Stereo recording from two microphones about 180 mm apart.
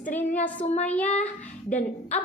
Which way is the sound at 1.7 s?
45° left (ahead or behind).